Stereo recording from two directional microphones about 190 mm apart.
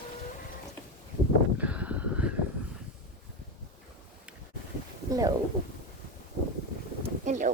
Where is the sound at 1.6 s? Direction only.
5° right (ahead or behind).